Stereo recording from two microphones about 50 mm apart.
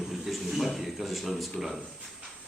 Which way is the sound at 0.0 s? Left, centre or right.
Centre.